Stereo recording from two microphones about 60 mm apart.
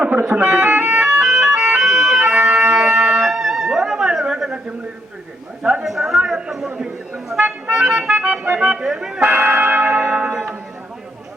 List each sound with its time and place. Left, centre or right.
0.2 s speech: right
0.9 s a sound: centre
2.3 s music: centre
5.8 s a sound: centre
6.7 s chatter: centre
7.4 s music: centre
8.8 s speech: centre
9.5 s a sound: right
9.8 s church bell: centre